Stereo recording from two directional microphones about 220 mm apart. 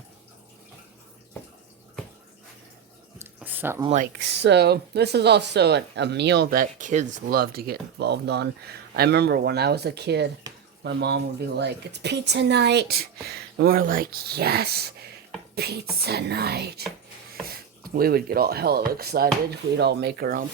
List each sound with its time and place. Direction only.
3.2 s a sound: 10° right (ahead or behind)
3.8 s speech: 35° right (ahead or behind)
4.2 s speech: 50° right (ahead or behind)
17.8 s speech: 40° right (ahead or behind)